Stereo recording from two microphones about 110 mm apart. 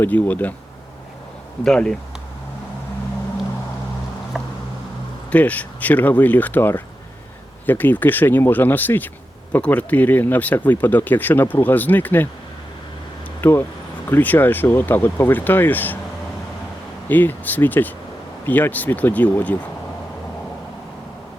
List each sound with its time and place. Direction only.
0.0 s speech: 15° left (ahead or behind)
1.6 s speech: 5° left (ahead or behind)
4.4 s a sound: 5° right (ahead or behind)
5.3 s speech: 15° left (ahead or behind)
13.4 s speech: 20° left (ahead or behind)
17.1 s speech: 15° left (ahead or behind)